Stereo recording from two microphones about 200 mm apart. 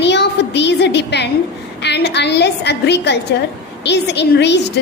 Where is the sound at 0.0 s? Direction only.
60° left (ahead or behind).